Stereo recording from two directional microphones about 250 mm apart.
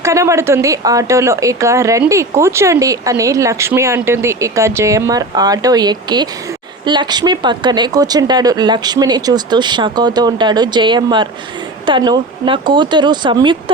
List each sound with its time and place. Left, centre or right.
0.0 s speech: centre